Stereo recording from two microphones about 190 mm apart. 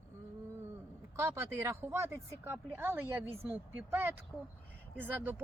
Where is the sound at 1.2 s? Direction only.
15° right (ahead or behind).